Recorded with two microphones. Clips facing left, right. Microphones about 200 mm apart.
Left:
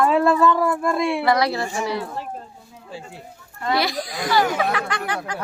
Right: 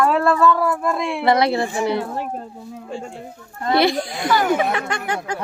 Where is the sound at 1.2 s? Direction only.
25° right (ahead or behind).